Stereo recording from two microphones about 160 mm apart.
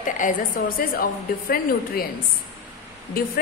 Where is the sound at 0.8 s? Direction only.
65° left (ahead or behind).